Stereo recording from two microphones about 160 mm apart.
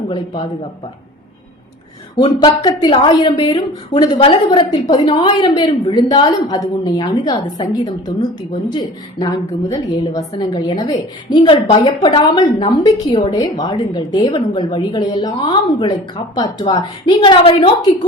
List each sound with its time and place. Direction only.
2.1 s a woman's voice: 30° left (ahead or behind)